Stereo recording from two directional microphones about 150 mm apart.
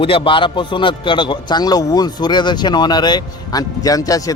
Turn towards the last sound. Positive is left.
turn(degrees=25)  # may be behind; listen again after turning